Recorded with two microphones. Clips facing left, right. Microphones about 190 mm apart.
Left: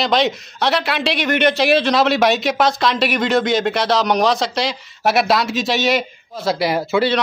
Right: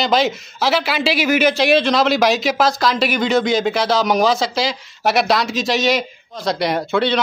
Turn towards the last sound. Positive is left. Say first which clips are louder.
# left 1 dB
turn(degrees=5)  # may be behind; listen again after turning